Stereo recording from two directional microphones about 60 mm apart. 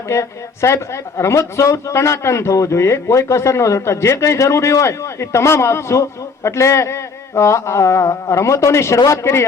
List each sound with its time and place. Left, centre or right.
0.1 s a woman's voice: left